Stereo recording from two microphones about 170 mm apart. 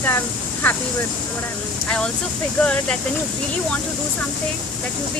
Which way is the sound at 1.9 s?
5° left (ahead or behind).